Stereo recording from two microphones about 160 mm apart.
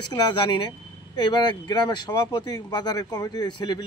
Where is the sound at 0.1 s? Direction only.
30° left (ahead or behind).